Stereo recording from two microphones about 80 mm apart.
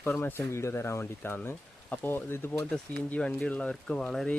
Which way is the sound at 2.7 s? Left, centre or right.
Centre.